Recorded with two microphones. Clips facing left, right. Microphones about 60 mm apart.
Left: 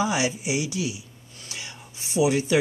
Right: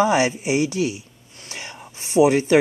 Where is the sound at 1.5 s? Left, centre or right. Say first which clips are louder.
Right 4 dB; right.